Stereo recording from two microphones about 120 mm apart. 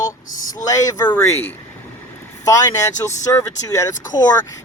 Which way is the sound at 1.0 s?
15° left (ahead or behind).